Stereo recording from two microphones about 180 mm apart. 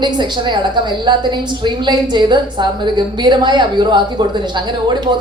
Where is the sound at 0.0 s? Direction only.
25° right (ahead or behind).